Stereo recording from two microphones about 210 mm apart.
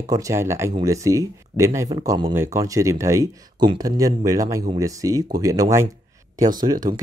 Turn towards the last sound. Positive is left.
turn(degrees=-20)  # may be behind; listen again after turning